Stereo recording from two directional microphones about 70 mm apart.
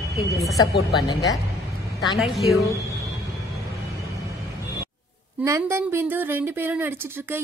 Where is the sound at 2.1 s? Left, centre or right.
Centre.